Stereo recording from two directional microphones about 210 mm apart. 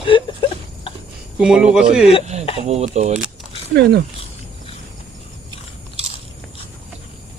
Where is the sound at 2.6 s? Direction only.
30° right (ahead or behind).